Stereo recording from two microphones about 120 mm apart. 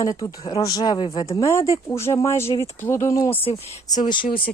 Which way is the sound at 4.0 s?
40° left (ahead or behind).